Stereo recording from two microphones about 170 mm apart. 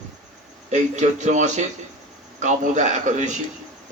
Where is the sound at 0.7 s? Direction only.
45° right (ahead or behind).